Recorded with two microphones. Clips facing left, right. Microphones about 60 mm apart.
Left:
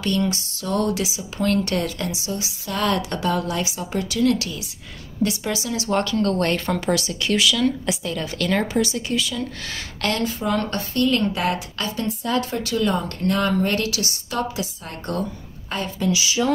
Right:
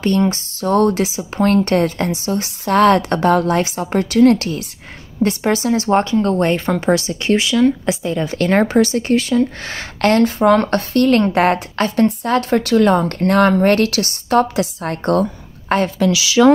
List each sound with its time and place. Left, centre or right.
0.0 s a woman's voice: right; by 6.8 s centre
6.9 s speech: right
8.5 s a woman's voice: right